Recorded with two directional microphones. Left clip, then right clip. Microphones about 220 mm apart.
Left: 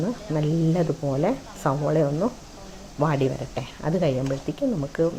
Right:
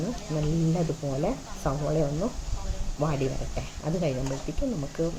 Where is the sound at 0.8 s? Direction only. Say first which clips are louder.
Left 5 dB; 25° left (ahead or behind).